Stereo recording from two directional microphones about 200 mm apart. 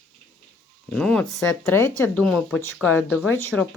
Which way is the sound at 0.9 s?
5° left (ahead or behind).